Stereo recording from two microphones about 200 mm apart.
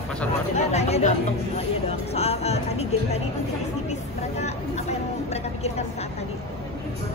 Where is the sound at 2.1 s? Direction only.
30° left (ahead or behind).